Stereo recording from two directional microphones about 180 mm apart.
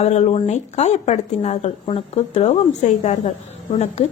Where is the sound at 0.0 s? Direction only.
35° left (ahead or behind).